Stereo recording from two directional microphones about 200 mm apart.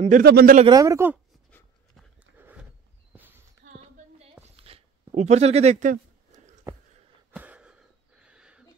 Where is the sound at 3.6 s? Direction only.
30° right (ahead or behind).